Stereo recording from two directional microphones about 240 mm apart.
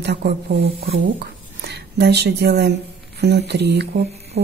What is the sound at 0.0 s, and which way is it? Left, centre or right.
Speech, right.